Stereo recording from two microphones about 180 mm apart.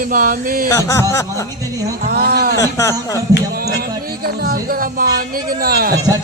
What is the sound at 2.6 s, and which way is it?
Speech, 15° left (ahead or behind).